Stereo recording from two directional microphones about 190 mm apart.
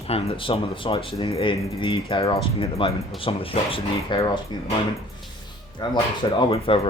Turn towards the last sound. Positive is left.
turn(degrees=30)  # may be behind; listen again after turning